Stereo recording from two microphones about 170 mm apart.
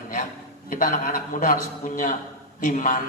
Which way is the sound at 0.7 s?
55° left (ahead or behind).